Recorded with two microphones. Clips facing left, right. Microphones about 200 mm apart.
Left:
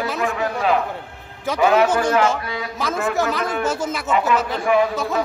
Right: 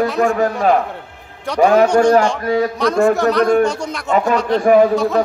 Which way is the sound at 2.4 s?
45° right (ahead or behind).